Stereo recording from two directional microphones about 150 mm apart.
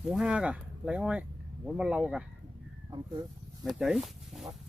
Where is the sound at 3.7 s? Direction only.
Centre (ahead or behind).